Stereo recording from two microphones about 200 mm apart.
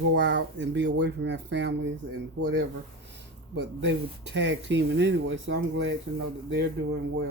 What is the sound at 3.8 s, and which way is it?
Speech, 65° right (ahead or behind).